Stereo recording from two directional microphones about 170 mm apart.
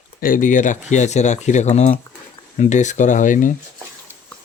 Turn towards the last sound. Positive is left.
turn(degrees=50)  # may be behind; listen again after turning